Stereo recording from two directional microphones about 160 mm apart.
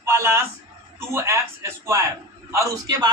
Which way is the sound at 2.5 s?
20° right (ahead or behind).